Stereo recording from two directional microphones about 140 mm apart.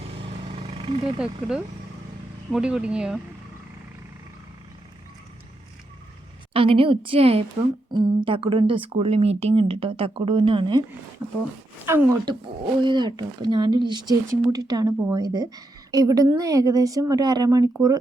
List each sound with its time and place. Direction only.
0.2 s vehicle: 40° right (ahead or behind)
1.2 s speech: 5° right (ahead or behind)
6.5 s speech: 40° right (ahead or behind)
11.2 s speech: 10° right (ahead or behind)
12.8 s speech: 35° right (ahead or behind)